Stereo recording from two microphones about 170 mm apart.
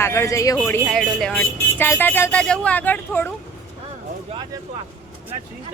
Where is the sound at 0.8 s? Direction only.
Centre (ahead or behind).